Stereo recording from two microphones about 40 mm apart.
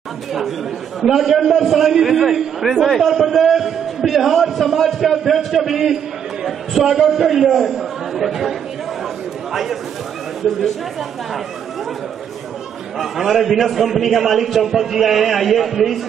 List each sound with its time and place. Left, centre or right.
1.0 s a man's voice: centre
13.0 s a man's voice: centre